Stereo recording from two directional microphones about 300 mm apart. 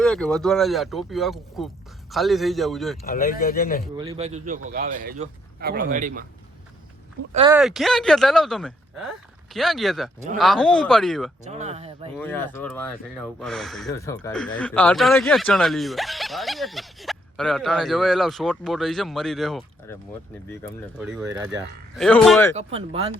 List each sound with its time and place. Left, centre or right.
0.0 s speech: centre
3.0 s speech: left
3.9 s speech: centre
7.5 s speech: centre
11.4 s speech: right
12.1 s speech: centre
21.0 s speech: centre
22.5 s speech: centre